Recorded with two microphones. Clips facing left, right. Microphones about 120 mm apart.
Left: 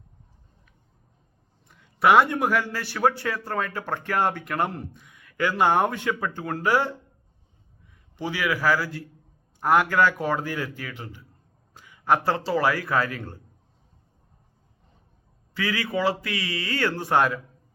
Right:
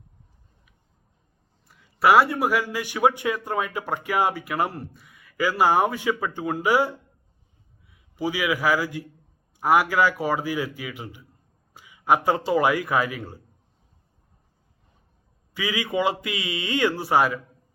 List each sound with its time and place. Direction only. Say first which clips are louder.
1.6 s a man's voice: right 1 dB; 5° right (ahead or behind)
7.9 s a man's voice: right 3 dB; 10° right (ahead or behind)
15.5 s a man's voice: right 1 dB; 15° right (ahead or behind)